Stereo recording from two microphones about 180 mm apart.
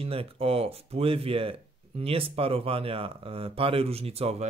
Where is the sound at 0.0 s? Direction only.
30° right (ahead or behind).